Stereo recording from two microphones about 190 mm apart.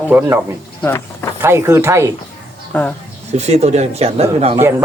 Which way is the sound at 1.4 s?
15° right (ahead or behind).